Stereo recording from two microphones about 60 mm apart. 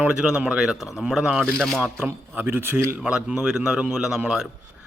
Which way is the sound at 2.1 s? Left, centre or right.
Right.